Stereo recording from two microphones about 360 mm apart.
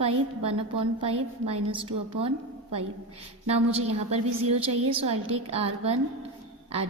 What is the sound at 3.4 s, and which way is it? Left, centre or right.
A woman's voice, centre.